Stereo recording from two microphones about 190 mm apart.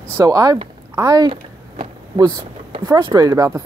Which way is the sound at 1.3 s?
25° right (ahead or behind).